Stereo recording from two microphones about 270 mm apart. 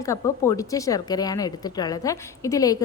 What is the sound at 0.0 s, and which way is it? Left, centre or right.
Speech, centre.